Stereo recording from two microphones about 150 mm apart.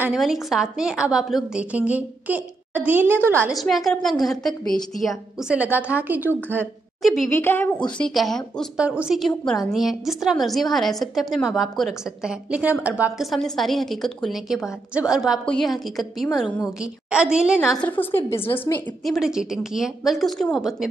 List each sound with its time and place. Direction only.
0.0 s a woman's voice: 5° right (ahead or behind)
3.5 s a woman's voice: centre (ahead or behind)
7.0 s a woman's voice: centre (ahead or behind)
7.2 s a woman's voice: 15° left (ahead or behind)
8.8 s a woman's voice: 10° right (ahead or behind)
17.7 s a woman's voice: 10° left (ahead or behind)
19.0 s a woman's voice: 5° right (ahead or behind)